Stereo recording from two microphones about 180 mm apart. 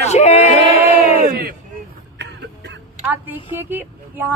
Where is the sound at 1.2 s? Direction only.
55° right (ahead or behind).